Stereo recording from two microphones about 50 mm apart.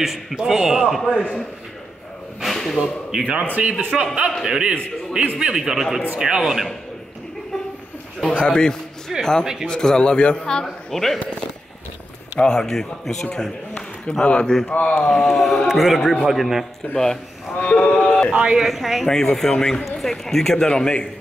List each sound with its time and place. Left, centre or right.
0.0 s a man's voice: centre
2.4 s a sound: centre
2.8 s a man's voice: centre
3.5 s a man's voice: right; by 6.0 s centre
6.1 s a man's voice: centre
6.4 s speech: centre
8.3 s a man's voice: left; by 11.1 s centre
12.4 s a man's voice: centre
14.2 s a man's voice: left
15.0 s speech: centre
16.9 s a man's voice: centre
17.6 s a sound: left
18.6 s speech: centre
19.0 s a man's voice: centre